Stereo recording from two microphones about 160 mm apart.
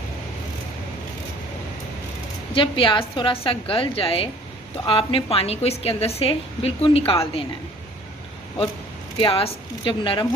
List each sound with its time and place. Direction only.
2.6 s a woman's voice: 30° left (ahead or behind)
9.1 s a woman's voice: 35° left (ahead or behind)